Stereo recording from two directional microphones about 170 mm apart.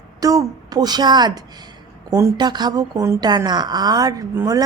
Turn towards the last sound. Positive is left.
turn(degrees=-20)  # may be behind; listen again after turning